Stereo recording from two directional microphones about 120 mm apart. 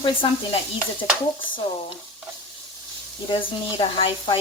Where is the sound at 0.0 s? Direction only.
45° left (ahead or behind).